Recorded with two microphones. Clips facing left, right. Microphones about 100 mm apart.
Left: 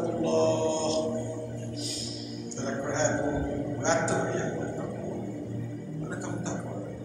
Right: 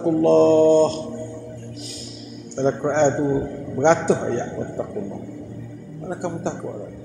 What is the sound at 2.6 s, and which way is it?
A man's voice, 60° right (ahead or behind).